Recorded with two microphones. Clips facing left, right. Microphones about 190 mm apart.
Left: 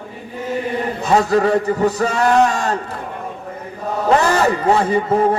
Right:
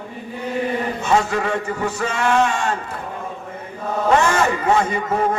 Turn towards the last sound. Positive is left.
turn(degrees=35)  # may be behind; listen again after turning